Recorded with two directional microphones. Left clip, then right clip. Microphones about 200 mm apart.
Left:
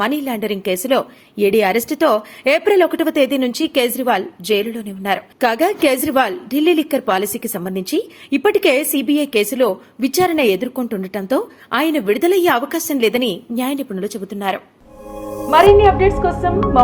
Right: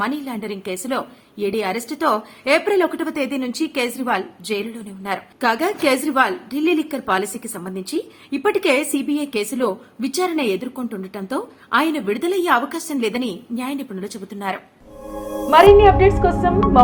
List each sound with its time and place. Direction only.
0.0 s a woman's voice: 40° left (ahead or behind)
15.4 s speech: centre (ahead or behind)